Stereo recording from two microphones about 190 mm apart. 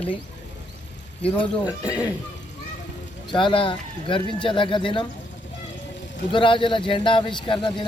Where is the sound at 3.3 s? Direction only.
25° left (ahead or behind).